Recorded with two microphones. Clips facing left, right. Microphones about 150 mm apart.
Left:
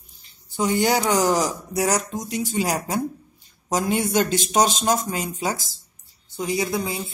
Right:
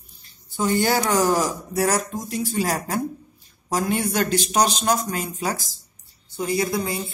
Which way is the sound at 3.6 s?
20° left (ahead or behind).